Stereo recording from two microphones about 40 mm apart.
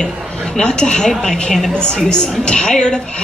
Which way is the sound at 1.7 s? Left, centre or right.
Left.